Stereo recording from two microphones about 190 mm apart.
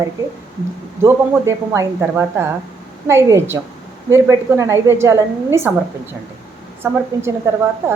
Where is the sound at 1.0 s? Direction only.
15° right (ahead or behind).